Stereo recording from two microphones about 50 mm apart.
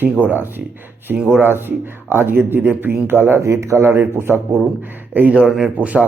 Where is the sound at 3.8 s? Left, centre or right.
Right.